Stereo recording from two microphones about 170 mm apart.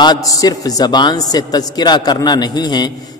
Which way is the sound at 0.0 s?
25° left (ahead or behind).